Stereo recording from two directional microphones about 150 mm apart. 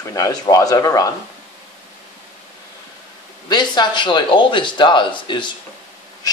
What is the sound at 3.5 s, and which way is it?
A man's voice, 30° left (ahead or behind).